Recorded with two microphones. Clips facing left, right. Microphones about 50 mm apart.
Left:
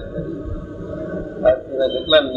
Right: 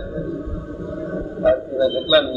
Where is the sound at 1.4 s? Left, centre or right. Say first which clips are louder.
Left 1 dB; centre.